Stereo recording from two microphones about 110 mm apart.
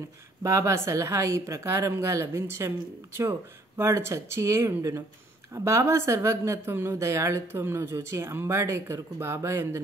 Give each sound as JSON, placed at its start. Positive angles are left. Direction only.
{"t": 0.4, "sound": "speech", "side_deg": -25}